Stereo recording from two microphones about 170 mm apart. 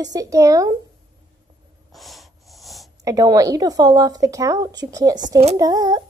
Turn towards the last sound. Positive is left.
turn(degrees=-25)  # may be behind; listen again after turning